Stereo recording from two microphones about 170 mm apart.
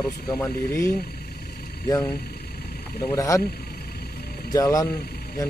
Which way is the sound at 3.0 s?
20° left (ahead or behind).